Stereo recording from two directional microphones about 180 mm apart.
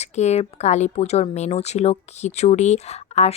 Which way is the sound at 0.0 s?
40° left (ahead or behind).